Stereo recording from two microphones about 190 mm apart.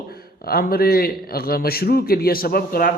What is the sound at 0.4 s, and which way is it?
A man's voice, 55° left (ahead or behind).